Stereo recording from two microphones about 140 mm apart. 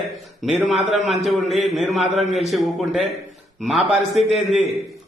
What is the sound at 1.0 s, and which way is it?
A man's voice, centre (ahead or behind).